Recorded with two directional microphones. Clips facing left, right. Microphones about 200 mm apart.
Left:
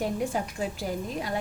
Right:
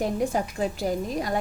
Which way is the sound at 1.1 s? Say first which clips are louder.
Right 4 dB; 40° right (ahead or behind).